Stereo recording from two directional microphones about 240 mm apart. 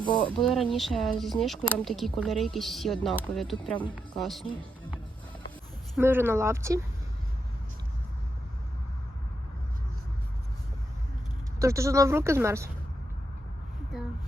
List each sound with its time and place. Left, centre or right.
0.0 s speech: centre
0.3 s speech: centre
3.6 s speech: centre
3.9 s speech: centre
6.0 s speech: centre
11.6 s speech: centre